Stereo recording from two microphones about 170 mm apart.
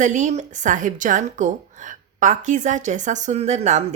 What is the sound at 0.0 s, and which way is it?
A woman's voice, 45° right (ahead or behind).